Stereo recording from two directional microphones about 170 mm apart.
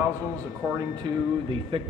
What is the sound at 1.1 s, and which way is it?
Speech, 25° right (ahead or behind).